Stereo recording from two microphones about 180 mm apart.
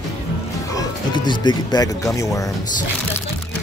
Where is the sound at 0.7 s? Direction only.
20° left (ahead or behind).